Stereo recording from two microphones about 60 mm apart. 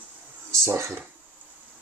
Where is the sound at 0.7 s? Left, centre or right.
Right.